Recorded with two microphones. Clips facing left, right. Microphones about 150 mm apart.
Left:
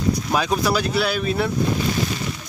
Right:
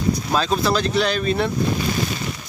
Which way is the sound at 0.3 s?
10° left (ahead or behind).